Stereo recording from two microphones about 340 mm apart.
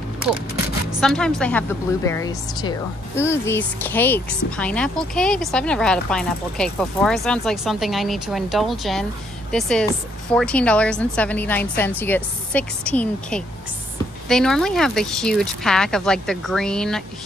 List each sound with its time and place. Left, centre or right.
1.0 s speech: centre